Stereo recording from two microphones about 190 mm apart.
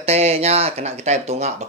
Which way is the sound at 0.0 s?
35° right (ahead or behind).